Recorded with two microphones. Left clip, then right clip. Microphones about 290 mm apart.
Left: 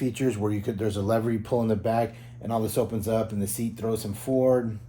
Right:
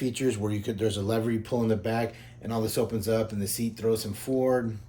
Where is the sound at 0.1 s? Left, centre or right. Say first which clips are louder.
Left 2 dB; centre.